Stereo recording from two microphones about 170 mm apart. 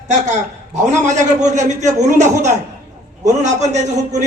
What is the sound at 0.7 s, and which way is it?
A man's voice, 45° right (ahead or behind).